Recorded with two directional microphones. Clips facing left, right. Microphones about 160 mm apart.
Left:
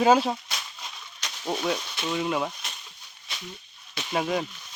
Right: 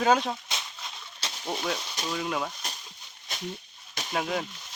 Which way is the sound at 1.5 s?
10° left (ahead or behind).